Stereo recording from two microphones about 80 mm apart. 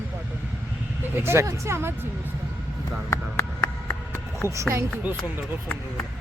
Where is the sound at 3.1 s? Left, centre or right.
Left.